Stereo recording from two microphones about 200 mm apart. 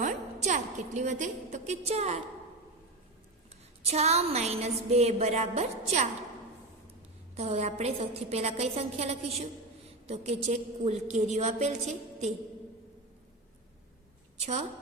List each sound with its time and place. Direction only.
0.0 s a woman's voice: 35° right (ahead or behind)
3.8 s a woman's voice: 30° right (ahead or behind)
7.3 s a woman's voice: 30° right (ahead or behind)